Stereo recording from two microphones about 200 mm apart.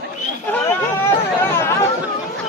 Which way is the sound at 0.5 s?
10° left (ahead or behind).